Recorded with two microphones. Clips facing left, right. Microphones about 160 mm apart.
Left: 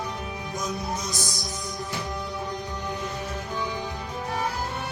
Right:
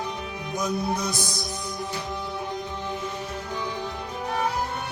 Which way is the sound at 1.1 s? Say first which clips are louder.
Right 2 dB; 60° right (ahead or behind).